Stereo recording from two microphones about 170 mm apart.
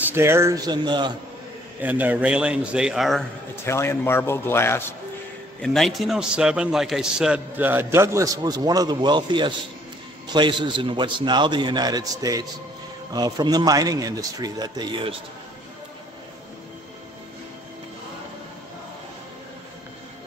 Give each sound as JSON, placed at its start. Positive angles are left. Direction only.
{"t": 0.0, "sound": "a man's voice", "side_deg": -15}
{"t": 1.8, "sound": "a man's voice", "side_deg": -10}
{"t": 3.6, "sound": "a man's voice", "side_deg": 15}
{"t": 5.6, "sound": "a man's voice", "side_deg": 0}